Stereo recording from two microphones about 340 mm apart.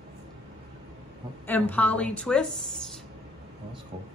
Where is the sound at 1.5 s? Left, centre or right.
Centre.